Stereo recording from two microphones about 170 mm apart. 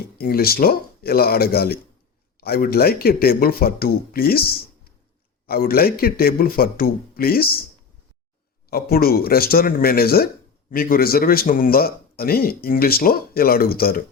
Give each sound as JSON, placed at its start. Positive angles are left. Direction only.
{"t": 0.2, "sound": "speech", "side_deg": 65}
{"t": 8.7, "sound": "speech", "side_deg": 65}